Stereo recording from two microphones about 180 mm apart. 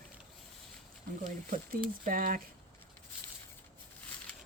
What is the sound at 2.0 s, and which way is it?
Speech, 50° right (ahead or behind).